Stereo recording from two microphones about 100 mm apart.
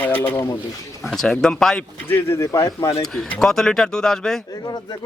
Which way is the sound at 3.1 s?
5° left (ahead or behind).